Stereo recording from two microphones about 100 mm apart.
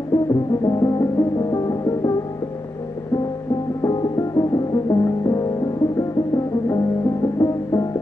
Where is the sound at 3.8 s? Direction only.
35° left (ahead or behind).